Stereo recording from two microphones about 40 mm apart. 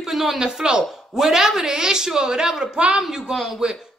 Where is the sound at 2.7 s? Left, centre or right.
Right.